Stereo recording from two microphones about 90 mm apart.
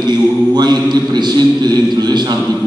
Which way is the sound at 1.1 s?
50° right (ahead or behind).